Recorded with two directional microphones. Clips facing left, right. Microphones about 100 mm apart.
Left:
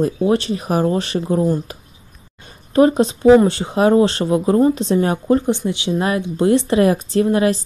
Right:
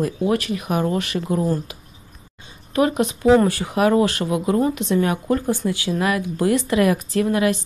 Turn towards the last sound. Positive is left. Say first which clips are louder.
# left 3 dB
turn(degrees=30)  # may be behind; listen again after turning